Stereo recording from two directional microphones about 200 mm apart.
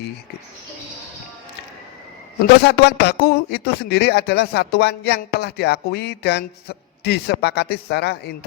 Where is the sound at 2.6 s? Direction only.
55° left (ahead or behind).